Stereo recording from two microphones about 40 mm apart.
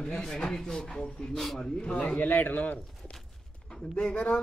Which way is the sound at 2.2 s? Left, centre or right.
Left.